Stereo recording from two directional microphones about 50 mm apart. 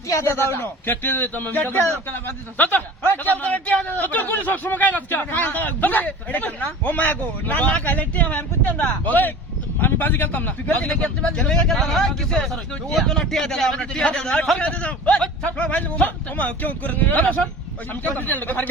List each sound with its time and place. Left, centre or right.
0.3 s a man's voice: left
0.9 s speech: left
11.7 s speech: centre
13.7 s speech: centre; by 18.7 s left